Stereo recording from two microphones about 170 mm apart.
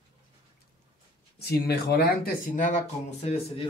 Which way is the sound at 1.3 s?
70° left (ahead or behind).